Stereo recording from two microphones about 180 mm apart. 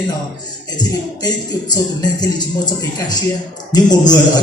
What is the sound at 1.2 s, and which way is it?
Speech, 20° left (ahead or behind).